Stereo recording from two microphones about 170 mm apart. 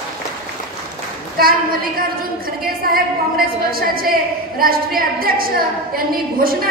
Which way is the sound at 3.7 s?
60° right (ahead or behind).